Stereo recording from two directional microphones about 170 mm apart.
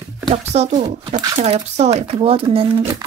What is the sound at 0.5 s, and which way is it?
Speech, 40° right (ahead or behind).